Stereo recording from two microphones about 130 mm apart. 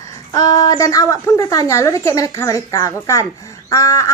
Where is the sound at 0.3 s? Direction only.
30° left (ahead or behind).